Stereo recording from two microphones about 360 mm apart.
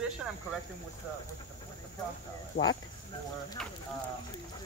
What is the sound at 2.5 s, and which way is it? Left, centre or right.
Speech, left.